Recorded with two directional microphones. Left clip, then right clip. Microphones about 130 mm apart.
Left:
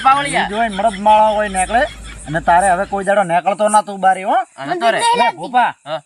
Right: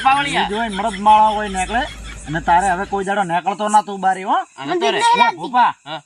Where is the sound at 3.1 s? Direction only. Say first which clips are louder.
Left 6 dB; 15° left (ahead or behind).